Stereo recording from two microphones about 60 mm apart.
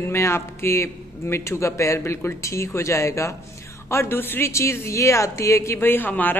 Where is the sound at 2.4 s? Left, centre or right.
Left.